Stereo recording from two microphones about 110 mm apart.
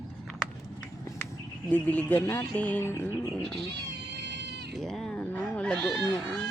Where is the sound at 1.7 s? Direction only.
15° left (ahead or behind).